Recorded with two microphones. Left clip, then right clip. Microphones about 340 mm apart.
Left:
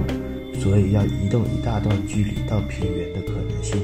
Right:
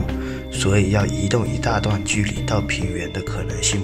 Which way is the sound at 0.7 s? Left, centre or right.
Right.